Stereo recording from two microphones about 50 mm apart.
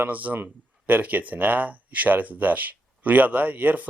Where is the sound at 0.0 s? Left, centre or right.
Right.